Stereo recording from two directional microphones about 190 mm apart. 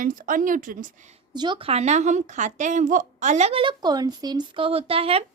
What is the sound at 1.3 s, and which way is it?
A woman's voice, 25° right (ahead or behind).